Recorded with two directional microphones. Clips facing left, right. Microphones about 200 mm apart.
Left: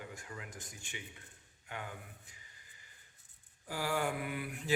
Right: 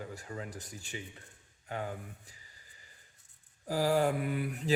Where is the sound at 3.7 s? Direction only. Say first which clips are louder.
Right 7 dB; 35° right (ahead or behind).